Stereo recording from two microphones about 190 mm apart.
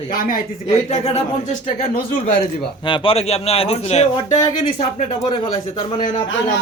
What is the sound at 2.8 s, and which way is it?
Speech, 25° left (ahead or behind).